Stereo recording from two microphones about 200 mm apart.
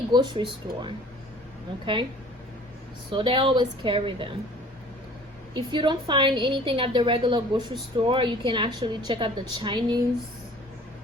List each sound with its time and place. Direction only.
0.1 s a woman's voice: 20° right (ahead or behind)
3.1 s a woman's voice: 25° right (ahead or behind)
5.5 s a woman's voice: 20° right (ahead or behind)